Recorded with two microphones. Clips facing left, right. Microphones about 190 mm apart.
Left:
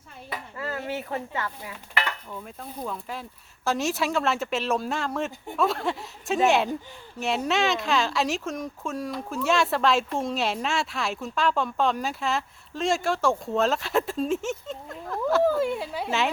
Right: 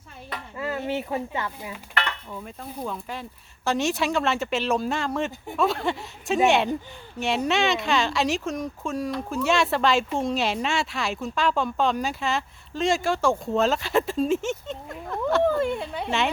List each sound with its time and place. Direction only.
0.5 s speech: 15° right (ahead or behind)
1.7 s dishes: 5° left (ahead or behind)
2.3 s speech: centre (ahead or behind)